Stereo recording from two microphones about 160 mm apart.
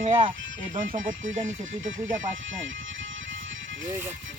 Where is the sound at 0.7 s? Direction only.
55° right (ahead or behind).